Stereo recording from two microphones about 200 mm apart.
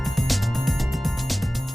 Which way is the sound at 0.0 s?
Centre (ahead or behind).